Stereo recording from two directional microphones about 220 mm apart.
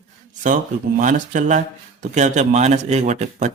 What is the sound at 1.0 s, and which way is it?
Speech, 35° right (ahead or behind).